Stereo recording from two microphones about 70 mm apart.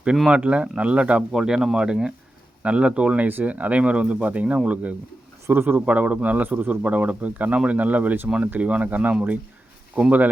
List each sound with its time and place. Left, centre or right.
0.3 s speech: centre
1.3 s speech: centre